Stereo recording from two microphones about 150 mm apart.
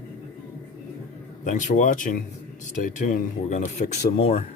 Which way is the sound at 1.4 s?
55° left (ahead or behind).